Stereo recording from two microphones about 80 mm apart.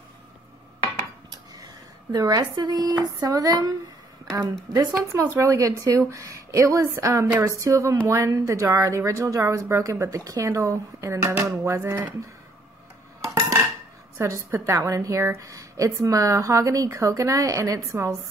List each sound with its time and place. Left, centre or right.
2.1 s speech: right
4.3 s a woman's voice: right
11.2 s a woman's voice: right
14.1 s a woman's voice: right